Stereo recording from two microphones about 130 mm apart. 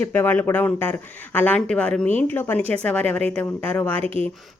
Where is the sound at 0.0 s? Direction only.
15° left (ahead or behind).